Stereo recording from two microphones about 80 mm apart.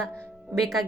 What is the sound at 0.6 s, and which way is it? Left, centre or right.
Speech, centre.